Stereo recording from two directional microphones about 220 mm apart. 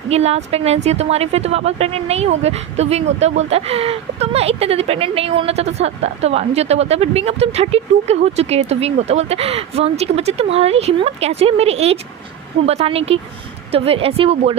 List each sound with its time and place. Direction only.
0.1 s a woman's voice: 30° right (ahead or behind)